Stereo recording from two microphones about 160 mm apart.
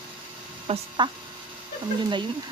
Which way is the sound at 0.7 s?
30° right (ahead or behind).